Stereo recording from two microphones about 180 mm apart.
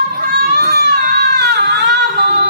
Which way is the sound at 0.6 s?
65° right (ahead or behind).